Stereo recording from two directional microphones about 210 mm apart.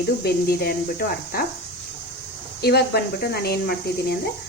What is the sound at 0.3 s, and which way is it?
Speech, 45° left (ahead or behind).